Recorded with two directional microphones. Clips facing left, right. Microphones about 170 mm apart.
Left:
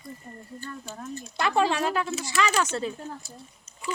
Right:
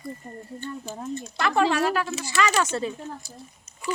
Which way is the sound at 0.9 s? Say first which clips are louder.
Right 5 dB; 30° right (ahead or behind).